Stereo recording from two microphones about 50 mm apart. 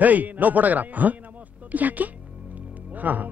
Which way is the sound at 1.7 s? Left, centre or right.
Right.